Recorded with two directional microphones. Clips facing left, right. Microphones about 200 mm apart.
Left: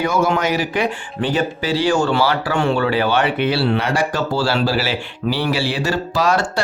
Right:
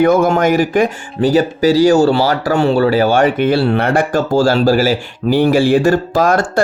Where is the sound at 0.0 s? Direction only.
55° right (ahead or behind).